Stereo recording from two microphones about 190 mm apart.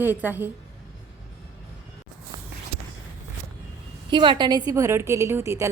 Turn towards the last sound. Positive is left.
turn(degrees=-15)  # may be behind; listen again after turning